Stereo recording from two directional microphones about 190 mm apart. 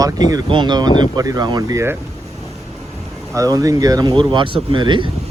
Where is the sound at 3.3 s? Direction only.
20° right (ahead or behind).